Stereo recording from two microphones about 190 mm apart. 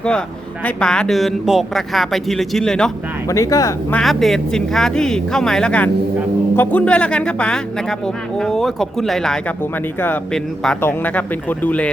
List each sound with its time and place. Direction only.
0.6 s speech: 5° left (ahead or behind)
3.2 s speech: 15° left (ahead or behind)
4.0 s speech: centre (ahead or behind)